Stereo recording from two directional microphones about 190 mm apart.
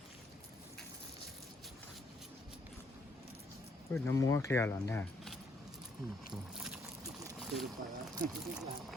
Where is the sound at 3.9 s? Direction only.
15° left (ahead or behind).